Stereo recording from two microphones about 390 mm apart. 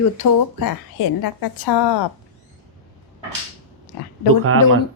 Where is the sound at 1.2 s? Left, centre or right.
Left.